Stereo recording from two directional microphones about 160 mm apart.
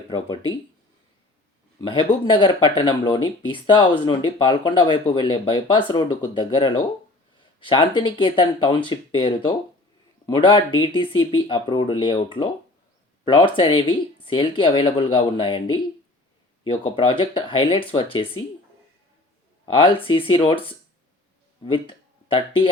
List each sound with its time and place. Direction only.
0.1 s speech: 30° left (ahead or behind)
1.8 s speech: 30° left (ahead or behind)
16.8 s speech: 35° left (ahead or behind)
19.6 s speech: 35° left (ahead or behind)